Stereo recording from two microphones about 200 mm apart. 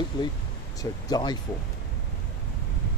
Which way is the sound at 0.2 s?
20° left (ahead or behind).